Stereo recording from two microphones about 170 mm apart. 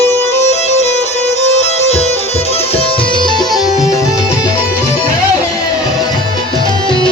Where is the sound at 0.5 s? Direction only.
40° left (ahead or behind).